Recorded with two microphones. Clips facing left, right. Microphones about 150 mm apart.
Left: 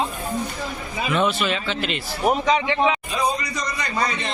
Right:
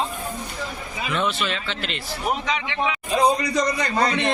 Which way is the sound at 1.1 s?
5° left (ahead or behind).